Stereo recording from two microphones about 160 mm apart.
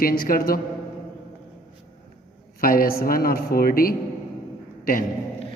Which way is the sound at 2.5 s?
65° left (ahead or behind).